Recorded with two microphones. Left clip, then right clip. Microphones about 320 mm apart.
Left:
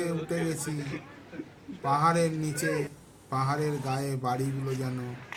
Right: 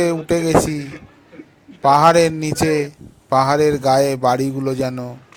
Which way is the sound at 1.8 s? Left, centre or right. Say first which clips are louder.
Right 14 dB; right.